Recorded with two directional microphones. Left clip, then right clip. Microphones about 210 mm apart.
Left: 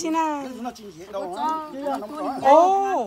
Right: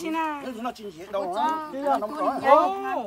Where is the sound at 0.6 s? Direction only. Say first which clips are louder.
Right 1 dB; 20° right (ahead or behind).